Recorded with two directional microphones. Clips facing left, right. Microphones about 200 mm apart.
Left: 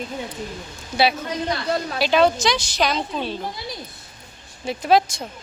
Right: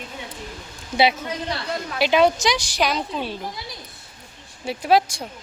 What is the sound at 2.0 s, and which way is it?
A woman's voice, 15° right (ahead or behind).